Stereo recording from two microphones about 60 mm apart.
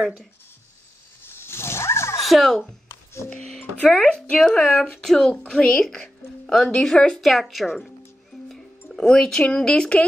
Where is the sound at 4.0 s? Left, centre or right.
Centre.